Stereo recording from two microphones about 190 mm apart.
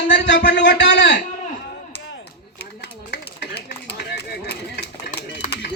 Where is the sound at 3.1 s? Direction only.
60° left (ahead or behind).